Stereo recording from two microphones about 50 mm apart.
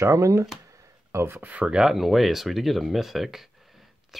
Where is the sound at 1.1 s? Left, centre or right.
Right.